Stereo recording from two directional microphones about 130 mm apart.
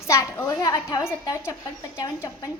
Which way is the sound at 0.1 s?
25° left (ahead or behind).